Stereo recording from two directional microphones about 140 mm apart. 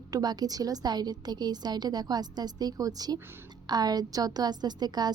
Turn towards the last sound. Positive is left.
turn(degrees=-30)  # may be behind; listen again after turning